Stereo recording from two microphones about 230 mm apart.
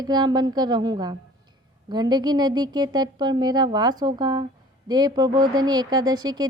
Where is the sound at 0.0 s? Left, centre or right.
Centre.